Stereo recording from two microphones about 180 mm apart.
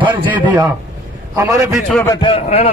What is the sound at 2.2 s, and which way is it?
Speech, 30° left (ahead or behind).